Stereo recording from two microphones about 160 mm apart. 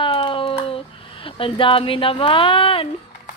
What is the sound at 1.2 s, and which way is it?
Speech, 35° left (ahead or behind).